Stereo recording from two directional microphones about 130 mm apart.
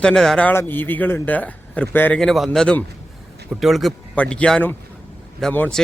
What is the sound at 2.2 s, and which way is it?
Speech, centre (ahead or behind).